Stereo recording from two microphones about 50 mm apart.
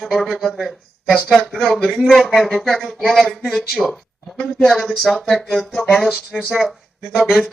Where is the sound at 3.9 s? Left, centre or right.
Left.